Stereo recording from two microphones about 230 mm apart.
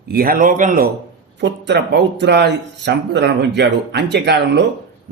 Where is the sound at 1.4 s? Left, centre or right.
Right.